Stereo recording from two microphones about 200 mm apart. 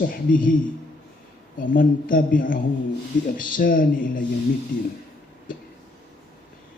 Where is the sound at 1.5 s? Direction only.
45° left (ahead or behind).